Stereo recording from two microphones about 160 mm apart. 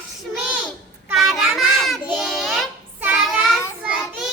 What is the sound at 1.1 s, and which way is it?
Child singing, centre (ahead or behind).